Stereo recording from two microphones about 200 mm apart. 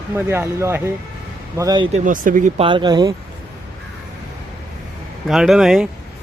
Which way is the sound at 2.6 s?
25° right (ahead or behind).